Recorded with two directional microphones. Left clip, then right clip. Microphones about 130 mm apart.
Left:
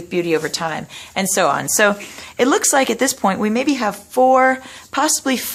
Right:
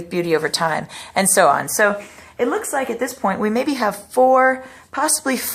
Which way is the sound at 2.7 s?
55° left (ahead or behind).